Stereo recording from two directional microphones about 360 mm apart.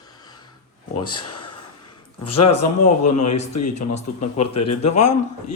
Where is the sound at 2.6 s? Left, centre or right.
Left.